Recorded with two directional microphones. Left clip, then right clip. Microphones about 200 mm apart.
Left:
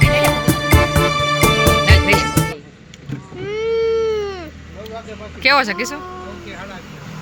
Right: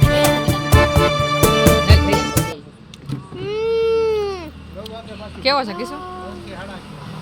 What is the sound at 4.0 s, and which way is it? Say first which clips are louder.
Baby cry: right 1 dB; 40° right (ahead or behind).